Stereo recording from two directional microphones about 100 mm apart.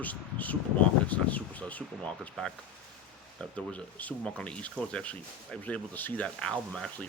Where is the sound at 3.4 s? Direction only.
15° left (ahead or behind).